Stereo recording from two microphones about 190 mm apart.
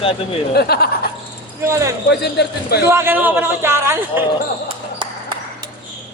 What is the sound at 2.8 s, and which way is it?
A man's voice, 15° right (ahead or behind).